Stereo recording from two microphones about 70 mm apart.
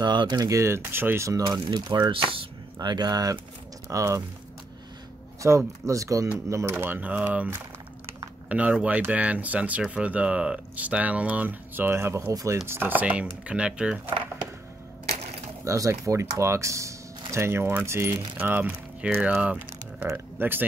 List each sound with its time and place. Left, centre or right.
0.0 s speech: right
0.5 s speech: right
1.4 s speech: right
3.9 s speech: right
5.4 s speech: right
5.9 s speech: right
6.5 s speech: right
7.0 s speech: right
12.3 s speech: right
12.6 s speech: right
13.0 s speech: centre
15.6 s speech: right
19.4 s a sound: centre
20.1 s speech: right